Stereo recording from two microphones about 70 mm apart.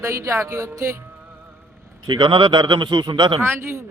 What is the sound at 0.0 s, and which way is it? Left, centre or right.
Music, right.